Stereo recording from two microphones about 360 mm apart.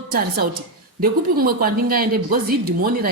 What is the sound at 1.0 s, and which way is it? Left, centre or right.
A woman's voice, right.